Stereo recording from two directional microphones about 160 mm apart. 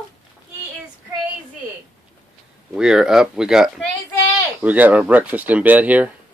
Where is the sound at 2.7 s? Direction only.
5° right (ahead or behind).